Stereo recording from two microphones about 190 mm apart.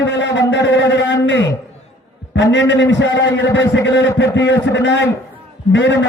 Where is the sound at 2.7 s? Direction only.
70° left (ahead or behind).